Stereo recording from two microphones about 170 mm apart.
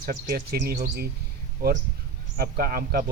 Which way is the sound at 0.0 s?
65° right (ahead or behind).